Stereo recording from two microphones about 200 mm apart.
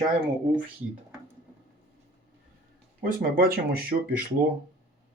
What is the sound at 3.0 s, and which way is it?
Speech, 45° right (ahead or behind).